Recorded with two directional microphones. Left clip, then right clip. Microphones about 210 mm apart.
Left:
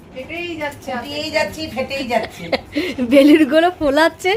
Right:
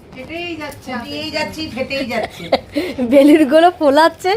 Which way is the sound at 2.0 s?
10° right (ahead or behind).